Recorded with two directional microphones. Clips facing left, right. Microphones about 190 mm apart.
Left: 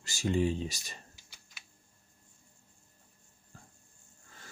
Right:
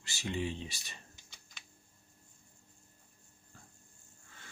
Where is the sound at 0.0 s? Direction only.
40° left (ahead or behind).